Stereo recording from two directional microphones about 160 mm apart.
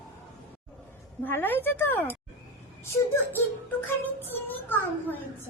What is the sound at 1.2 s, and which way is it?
Speech, 10° left (ahead or behind).